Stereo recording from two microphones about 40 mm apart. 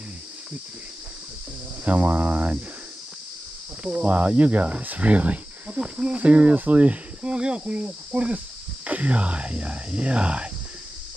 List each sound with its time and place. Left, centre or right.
1.9 s speech: right
3.8 s speech: right
7.3 s cricket: right
7.7 s speech: right